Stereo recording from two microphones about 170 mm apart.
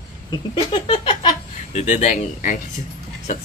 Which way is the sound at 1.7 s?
40° left (ahead or behind).